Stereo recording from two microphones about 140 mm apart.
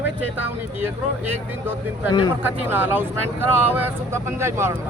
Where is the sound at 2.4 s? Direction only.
15° right (ahead or behind).